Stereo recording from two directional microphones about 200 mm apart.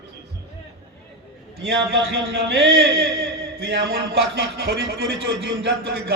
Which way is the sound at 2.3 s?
50° right (ahead or behind).